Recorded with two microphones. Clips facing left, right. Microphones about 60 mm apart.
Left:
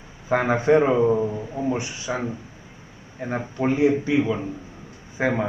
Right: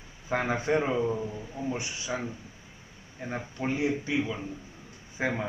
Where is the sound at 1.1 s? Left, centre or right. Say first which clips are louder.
Left 10 dB; left.